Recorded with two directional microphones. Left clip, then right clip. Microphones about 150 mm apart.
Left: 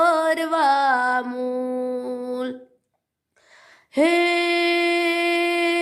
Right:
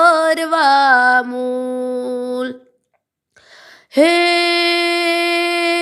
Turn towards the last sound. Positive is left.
turn(degrees=-25)  # may be behind; listen again after turning